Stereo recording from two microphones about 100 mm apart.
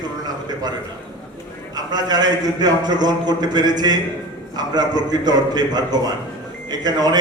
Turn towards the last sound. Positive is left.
turn(degrees=-45)  # may be behind; listen again after turning